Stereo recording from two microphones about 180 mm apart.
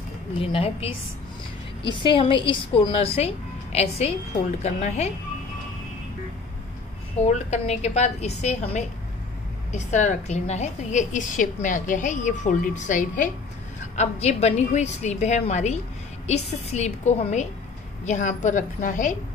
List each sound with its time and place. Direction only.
0.4 s a woman's voice: 30° left (ahead or behind)
7.2 s a woman's voice: 40° left (ahead or behind)